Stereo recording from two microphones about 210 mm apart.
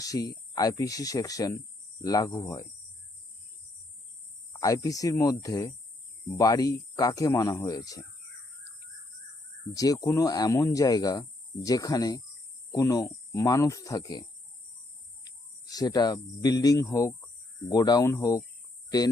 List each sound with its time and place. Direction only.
0.0 s speech: 15° left (ahead or behind)
4.5 s speech: 15° left (ahead or behind)
9.7 s speech: 15° left (ahead or behind)